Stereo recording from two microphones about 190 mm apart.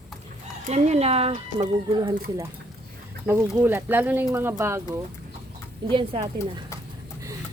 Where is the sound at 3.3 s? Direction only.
10° right (ahead or behind).